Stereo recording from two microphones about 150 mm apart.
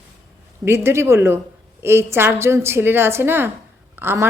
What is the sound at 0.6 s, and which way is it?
A woman's voice, 15° right (ahead or behind).